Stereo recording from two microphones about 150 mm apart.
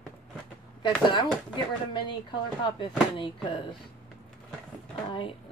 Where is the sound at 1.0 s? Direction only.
30° left (ahead or behind).